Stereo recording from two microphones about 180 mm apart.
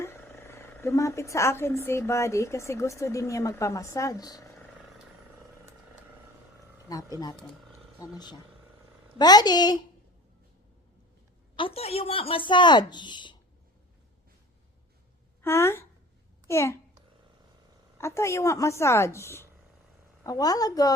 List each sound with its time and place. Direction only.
0.0 s a woman's voice: 15° left (ahead or behind)
6.8 s speech: 20° left (ahead or behind)
9.1 s speech: 20° left (ahead or behind)
11.5 s speech: 30° left (ahead or behind)
15.4 s a woman's voice: 15° left (ahead or behind)
17.9 s a woman's voice: 15° left (ahead or behind)